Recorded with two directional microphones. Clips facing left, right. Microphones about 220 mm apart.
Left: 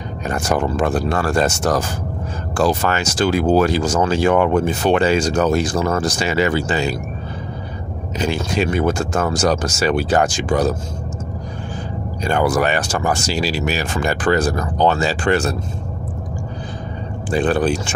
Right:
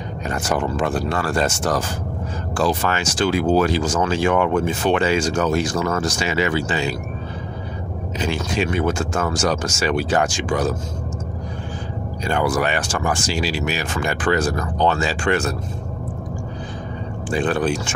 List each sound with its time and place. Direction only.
0.3 s speech: 40° left (ahead or behind)
8.2 s speech: 40° left (ahead or behind)
12.3 s speech: 45° left (ahead or behind)
17.3 s speech: 35° left (ahead or behind)